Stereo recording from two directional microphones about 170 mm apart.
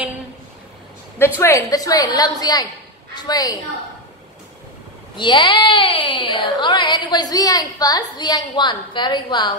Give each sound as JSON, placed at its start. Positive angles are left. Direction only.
{"t": 1.4, "sound": "speech", "side_deg": 20}
{"t": 5.1, "sound": "speech", "side_deg": 25}